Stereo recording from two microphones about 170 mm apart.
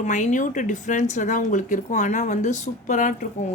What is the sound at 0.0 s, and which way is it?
Speech, 45° left (ahead or behind).